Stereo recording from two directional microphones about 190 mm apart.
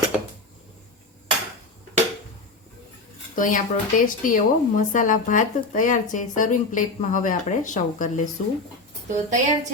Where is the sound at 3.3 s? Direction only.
45° left (ahead or behind).